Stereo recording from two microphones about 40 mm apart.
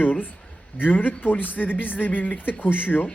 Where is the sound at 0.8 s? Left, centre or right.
Left.